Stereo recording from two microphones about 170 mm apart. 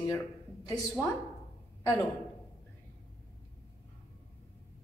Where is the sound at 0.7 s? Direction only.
20° left (ahead or behind).